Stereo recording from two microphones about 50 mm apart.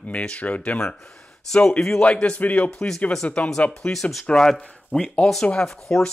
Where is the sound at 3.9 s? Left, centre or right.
Centre.